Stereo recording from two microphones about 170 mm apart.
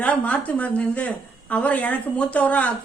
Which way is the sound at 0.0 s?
10° left (ahead or behind).